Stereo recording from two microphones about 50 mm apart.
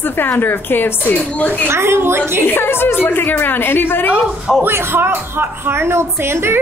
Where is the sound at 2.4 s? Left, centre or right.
Left.